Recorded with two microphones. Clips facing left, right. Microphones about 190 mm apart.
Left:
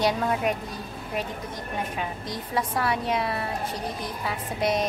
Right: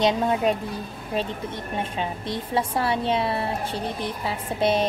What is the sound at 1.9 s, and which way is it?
A woman's voice, 25° right (ahead or behind).